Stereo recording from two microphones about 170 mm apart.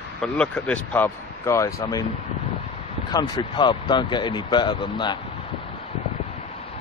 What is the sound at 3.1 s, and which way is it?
Speech, 25° left (ahead or behind).